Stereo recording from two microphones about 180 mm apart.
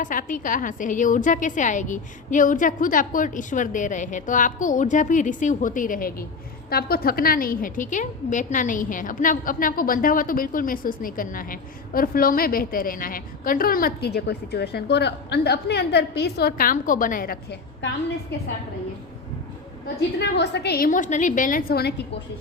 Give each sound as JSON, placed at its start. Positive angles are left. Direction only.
{"t": 0.0, "sound": "a woman's voice", "side_deg": 50}
{"t": 20.1, "sound": "a woman's voice", "side_deg": 70}